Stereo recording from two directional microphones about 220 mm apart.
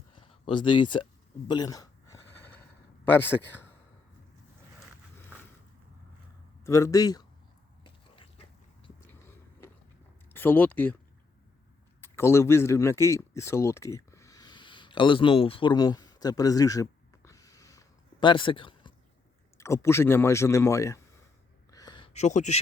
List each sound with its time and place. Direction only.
0.2 s speech: 20° left (ahead or behind)
1.5 s a sound: 15° left (ahead or behind)
3.1 s speech: 10° left (ahead or behind)
6.7 s speech: 15° left (ahead or behind)
7.9 s dog: 25° left (ahead or behind)
10.2 s speech: 10° left (ahead or behind)
11.9 s a sound: 10° left (ahead or behind)
19.5 s speech: 15° left (ahead or behind)
21.7 s a sound: 15° left (ahead or behind); by 22.6 s 30° left (ahead or behind)